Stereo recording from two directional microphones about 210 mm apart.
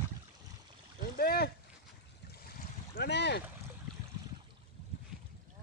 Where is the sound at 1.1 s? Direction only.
50° left (ahead or behind).